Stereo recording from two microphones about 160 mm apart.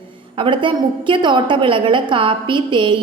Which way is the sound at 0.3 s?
30° right (ahead or behind).